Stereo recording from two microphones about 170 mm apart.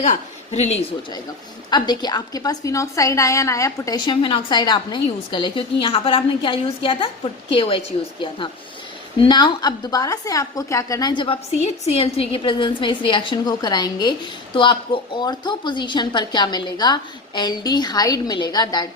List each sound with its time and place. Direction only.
0.0 s a woman's voice: 45° left (ahead or behind)
1.7 s a woman's voice: 25° left (ahead or behind)